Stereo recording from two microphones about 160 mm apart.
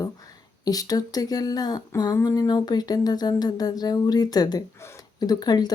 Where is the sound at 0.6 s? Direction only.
25° left (ahead or behind).